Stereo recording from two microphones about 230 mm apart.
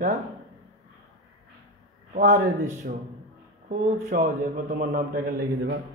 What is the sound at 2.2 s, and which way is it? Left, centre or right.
Speech, right.